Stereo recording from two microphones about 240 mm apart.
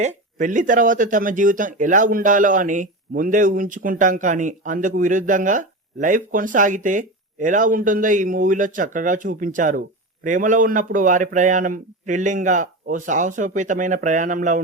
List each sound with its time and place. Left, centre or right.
0.3 s speech: right